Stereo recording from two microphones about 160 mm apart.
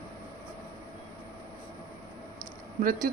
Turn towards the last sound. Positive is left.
turn(degrees=-65)  # may be behind; listen again after turning